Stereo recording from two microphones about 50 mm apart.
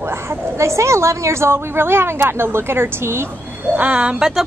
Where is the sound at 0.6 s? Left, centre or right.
Right.